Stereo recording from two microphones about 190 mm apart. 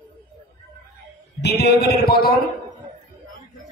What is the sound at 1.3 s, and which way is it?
A man's voice, 60° left (ahead or behind).